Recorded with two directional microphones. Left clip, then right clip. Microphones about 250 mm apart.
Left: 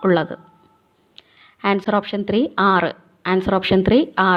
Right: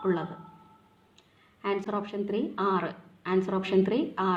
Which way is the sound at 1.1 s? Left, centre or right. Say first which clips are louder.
Left 18 dB; left.